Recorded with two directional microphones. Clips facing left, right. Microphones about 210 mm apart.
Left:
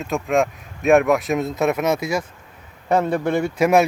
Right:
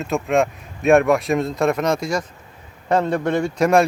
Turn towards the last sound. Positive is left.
turn(degrees=5)  # may be behind; listen again after turning